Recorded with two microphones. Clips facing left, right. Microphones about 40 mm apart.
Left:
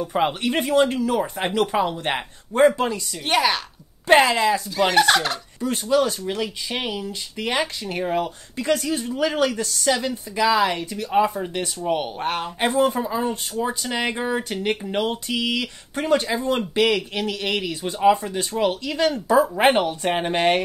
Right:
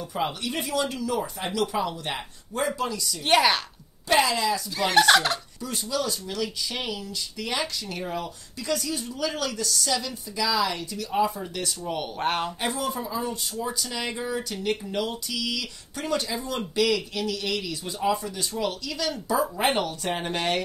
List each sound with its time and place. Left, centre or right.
0.0 s speech: left
3.3 s fowl: centre
4.1 s speech: left
4.7 s fowl: centre
5.6 s speech: left
12.2 s fowl: centre
12.5 s speech: left